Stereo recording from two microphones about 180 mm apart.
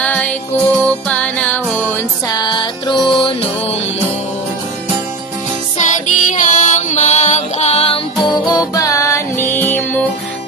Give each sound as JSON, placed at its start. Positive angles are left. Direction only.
{"t": 0.0, "sound": "music", "side_deg": 10}
{"t": 5.7, "sound": "music", "side_deg": 45}
{"t": 8.3, "sound": "music", "side_deg": 20}